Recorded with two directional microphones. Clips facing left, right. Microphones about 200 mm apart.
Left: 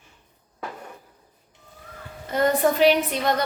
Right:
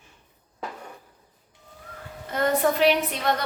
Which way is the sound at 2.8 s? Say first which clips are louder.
Left 3 dB; centre (ahead or behind).